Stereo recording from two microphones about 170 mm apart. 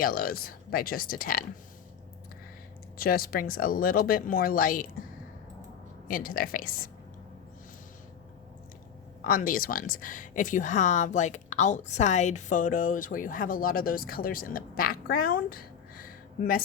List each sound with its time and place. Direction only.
0.0 s speech: 60° left (ahead or behind)
3.0 s speech: 60° left (ahead or behind)
6.1 s speech: 55° left (ahead or behind)
9.2 s speech: 55° left (ahead or behind)